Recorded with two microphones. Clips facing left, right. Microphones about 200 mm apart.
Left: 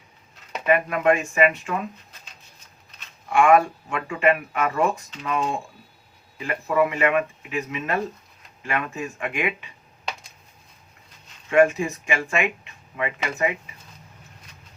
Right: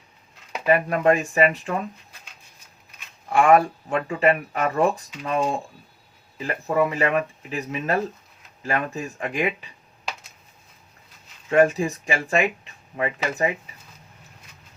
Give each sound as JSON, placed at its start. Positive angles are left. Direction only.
{"t": 0.6, "sound": "speech", "side_deg": -35}
{"t": 3.3, "sound": "speech", "side_deg": -35}
{"t": 10.1, "sound": "a sound", "side_deg": -5}
{"t": 11.5, "sound": "speech", "side_deg": -35}